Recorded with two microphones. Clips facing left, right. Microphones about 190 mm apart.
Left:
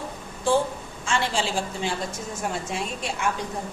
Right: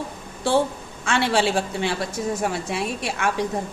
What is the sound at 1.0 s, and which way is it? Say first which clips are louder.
A woman's voice: right 5 dB; 65° right (ahead or behind).